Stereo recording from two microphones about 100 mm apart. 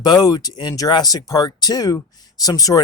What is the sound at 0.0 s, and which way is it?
Speech, 40° left (ahead or behind).